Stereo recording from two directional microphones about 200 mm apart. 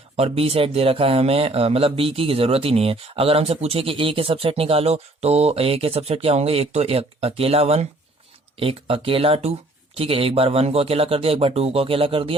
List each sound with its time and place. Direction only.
0.2 s speech: 30° right (ahead or behind)